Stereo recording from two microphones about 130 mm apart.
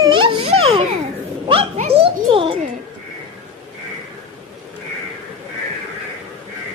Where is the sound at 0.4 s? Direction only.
50° right (ahead or behind).